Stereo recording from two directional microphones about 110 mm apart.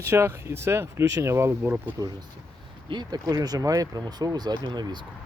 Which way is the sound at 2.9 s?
40° right (ahead or behind).